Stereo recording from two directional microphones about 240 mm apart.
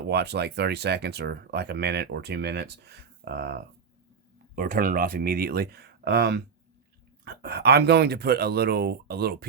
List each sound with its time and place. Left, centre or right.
0.1 s speech: right